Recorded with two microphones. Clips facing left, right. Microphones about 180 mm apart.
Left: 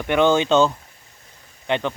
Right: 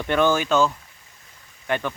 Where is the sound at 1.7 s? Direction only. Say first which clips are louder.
Left 3 dB; 20° left (ahead or behind).